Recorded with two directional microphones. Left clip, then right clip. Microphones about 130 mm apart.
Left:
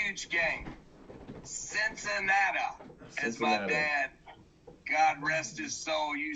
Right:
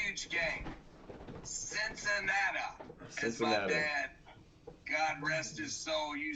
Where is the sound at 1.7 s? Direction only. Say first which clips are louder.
Left 3 dB; 20° left (ahead or behind).